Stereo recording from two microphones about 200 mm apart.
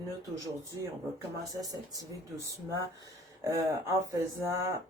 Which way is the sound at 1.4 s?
15° right (ahead or behind).